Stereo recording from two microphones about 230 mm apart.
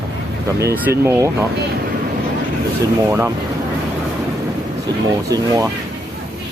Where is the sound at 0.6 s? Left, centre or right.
Centre.